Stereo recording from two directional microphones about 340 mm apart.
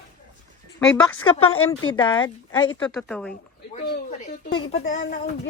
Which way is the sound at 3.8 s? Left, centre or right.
Centre.